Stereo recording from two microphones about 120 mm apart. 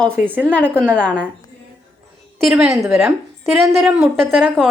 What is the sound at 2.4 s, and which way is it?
A woman's voice, centre (ahead or behind).